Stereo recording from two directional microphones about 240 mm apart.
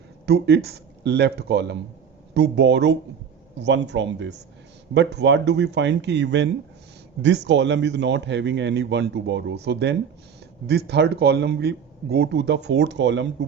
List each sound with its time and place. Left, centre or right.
0.3 s speech: right